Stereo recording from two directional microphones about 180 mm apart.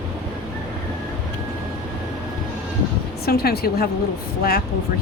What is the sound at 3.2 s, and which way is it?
Speech, 60° left (ahead or behind).